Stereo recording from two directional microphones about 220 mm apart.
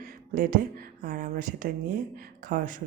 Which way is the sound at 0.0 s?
40° right (ahead or behind).